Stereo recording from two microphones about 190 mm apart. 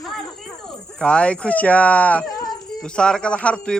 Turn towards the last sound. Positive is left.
turn(degrees=5)  # may be behind; listen again after turning